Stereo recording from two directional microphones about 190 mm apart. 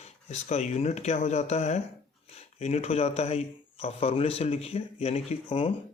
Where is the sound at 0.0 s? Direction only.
35° left (ahead or behind).